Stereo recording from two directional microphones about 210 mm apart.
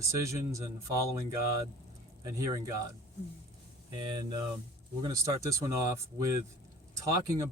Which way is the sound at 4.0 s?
20° right (ahead or behind).